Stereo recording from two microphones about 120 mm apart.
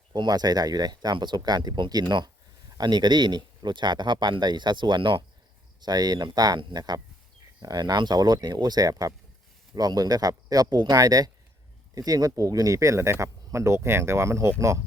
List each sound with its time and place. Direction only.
0.1 s speech: 35° right (ahead or behind)